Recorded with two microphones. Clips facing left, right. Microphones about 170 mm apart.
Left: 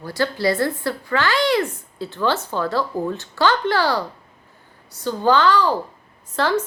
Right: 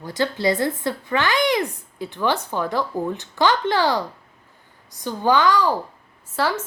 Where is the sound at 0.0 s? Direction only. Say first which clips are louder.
Left 1 dB; 20° right (ahead or behind).